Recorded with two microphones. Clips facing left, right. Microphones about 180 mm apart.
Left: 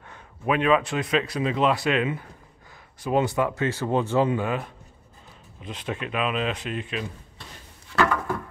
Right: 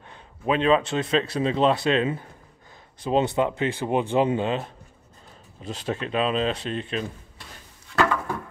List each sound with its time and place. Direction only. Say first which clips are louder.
0.1 s a man's voice: right 1 dB; 25° right (ahead or behind)
5.6 s speech: right 3 dB; 35° right (ahead or behind)